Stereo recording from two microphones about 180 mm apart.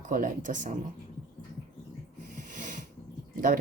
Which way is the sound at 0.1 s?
45° right (ahead or behind).